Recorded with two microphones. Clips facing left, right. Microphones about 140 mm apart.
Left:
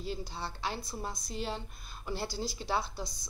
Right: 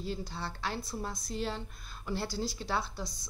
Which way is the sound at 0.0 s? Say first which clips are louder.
Right 1 dB; 5° left (ahead or behind).